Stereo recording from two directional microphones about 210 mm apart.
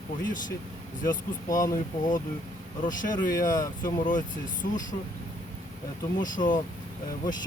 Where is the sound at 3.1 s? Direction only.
20° left (ahead or behind).